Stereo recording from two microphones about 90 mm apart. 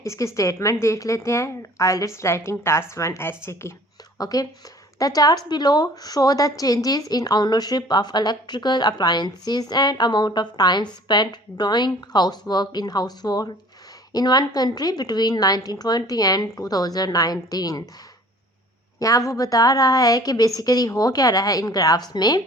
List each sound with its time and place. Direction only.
0.0 s a woman's voice: 35° left (ahead or behind)
4.2 s a woman's voice: 45° left (ahead or behind)
18.9 s a woman's voice: 40° left (ahead or behind)